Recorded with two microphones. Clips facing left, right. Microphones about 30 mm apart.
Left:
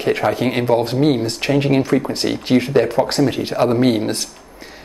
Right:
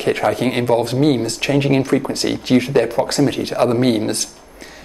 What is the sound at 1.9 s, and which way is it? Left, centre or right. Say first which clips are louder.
Speech: even; centre.